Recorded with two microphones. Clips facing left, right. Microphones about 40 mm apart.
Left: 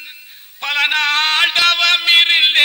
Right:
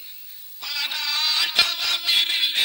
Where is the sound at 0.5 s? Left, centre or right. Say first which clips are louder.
Left 13 dB; left.